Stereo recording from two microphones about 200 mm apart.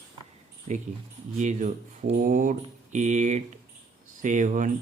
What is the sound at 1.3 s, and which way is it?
Speech, 35° right (ahead or behind).